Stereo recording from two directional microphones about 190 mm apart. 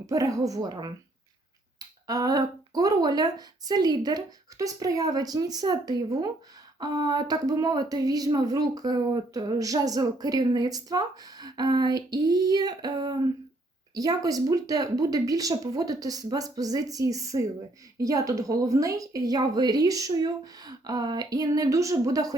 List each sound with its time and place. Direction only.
0.0 s speech: 15° right (ahead or behind)